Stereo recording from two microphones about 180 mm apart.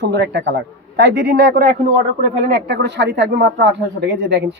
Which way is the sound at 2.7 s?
70° right (ahead or behind).